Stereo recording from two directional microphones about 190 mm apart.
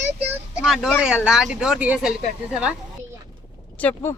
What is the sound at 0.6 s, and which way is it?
Speech, centre (ahead or behind).